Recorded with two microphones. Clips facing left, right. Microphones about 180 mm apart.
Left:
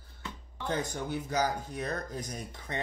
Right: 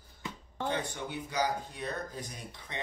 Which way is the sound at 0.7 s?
45° left (ahead or behind).